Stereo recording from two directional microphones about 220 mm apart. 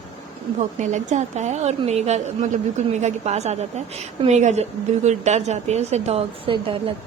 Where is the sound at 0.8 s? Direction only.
35° right (ahead or behind).